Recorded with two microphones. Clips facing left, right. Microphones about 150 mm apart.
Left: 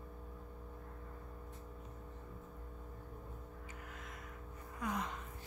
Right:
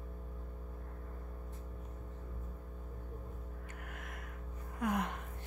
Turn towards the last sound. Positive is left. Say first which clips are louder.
# right 5 dB
turn(degrees=-60)  # may be behind; listen again after turning